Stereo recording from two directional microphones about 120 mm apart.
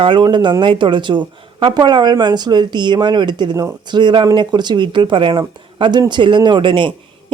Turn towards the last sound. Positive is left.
turn(degrees=-45)  # may be behind; listen again after turning